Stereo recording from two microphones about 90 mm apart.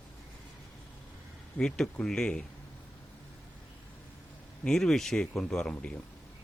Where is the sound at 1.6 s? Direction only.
10° left (ahead or behind).